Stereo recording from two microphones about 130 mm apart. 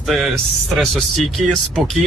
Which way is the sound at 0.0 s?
Centre (ahead or behind).